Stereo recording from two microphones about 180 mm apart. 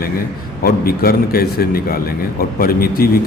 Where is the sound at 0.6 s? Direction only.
55° left (ahead or behind).